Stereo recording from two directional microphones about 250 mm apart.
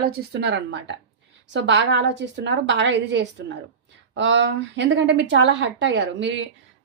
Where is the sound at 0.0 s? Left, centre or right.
Right.